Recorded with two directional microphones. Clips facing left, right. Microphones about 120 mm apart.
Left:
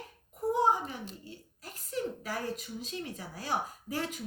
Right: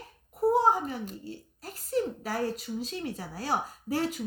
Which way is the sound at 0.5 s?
40° right (ahead or behind).